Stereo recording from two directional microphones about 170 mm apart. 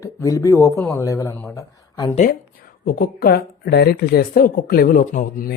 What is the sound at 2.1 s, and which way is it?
Speech, 55° left (ahead or behind).